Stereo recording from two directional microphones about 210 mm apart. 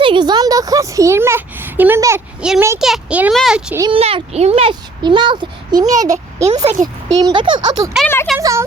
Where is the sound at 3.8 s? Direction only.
25° right (ahead or behind).